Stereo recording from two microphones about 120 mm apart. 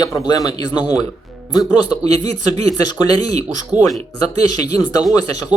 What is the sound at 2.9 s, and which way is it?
Speech, 35° left (ahead or behind).